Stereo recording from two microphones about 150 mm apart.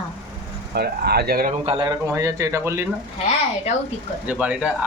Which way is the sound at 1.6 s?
35° right (ahead or behind).